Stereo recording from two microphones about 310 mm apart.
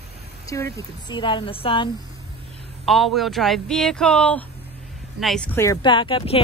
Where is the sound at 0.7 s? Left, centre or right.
Centre.